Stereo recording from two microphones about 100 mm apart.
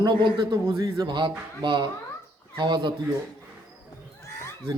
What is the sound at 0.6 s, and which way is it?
Speech, 30° right (ahead or behind).